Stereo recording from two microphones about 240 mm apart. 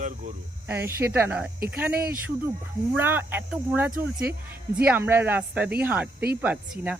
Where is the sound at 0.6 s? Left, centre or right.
Centre.